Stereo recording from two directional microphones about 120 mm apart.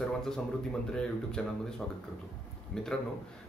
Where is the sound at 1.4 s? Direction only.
5° left (ahead or behind).